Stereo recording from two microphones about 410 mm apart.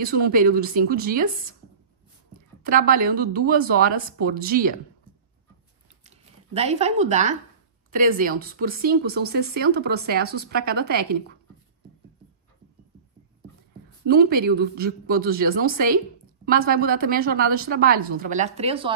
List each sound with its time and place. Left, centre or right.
0.0 s speech: right
2.9 s speech: right
6.0 s speech: centre
14.0 s speech: right